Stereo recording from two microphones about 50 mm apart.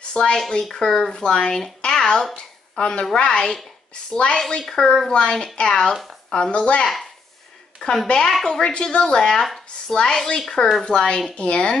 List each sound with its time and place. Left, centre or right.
0.1 s speech: centre
7.8 s a woman's voice: left
8.3 s speech: centre